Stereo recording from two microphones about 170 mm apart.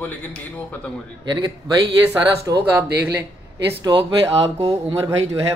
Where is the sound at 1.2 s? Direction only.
25° right (ahead or behind).